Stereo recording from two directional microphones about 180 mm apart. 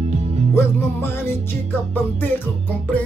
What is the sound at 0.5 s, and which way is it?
Music, 15° left (ahead or behind).